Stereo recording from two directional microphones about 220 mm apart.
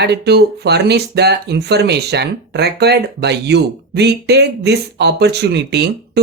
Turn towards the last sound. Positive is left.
turn(degrees=-50)  # may be behind; listen again after turning